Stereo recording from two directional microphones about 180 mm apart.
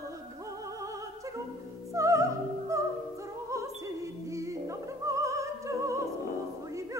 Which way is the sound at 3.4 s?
15° right (ahead or behind).